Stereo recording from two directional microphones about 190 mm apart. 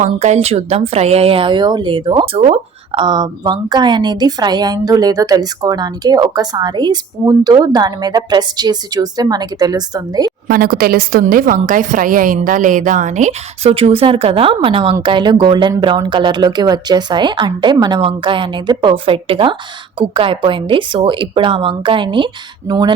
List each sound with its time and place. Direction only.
0.0 s a woman's voice: 35° right (ahead or behind); by 10.3 s 20° right (ahead or behind)
10.5 s a woman's voice: 50° right (ahead or behind); by 22.3 s 25° right (ahead or behind)